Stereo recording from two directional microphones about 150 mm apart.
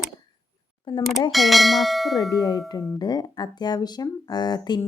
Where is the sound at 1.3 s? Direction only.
Centre (ahead or behind).